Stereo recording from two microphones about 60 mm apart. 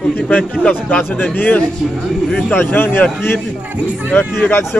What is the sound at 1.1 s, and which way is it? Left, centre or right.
A man's voice, left.